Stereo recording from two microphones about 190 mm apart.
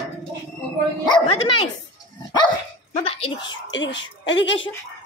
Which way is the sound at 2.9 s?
30° left (ahead or behind).